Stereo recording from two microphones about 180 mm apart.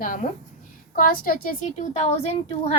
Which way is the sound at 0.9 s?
55° left (ahead or behind).